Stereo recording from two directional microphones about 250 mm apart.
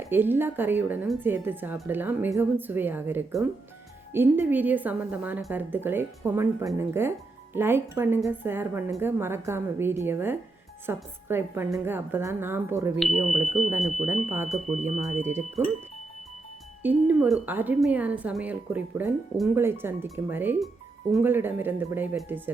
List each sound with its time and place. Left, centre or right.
0.1 s a woman's voice: centre
14.7 s speech: right
16.8 s a woman's voice: centre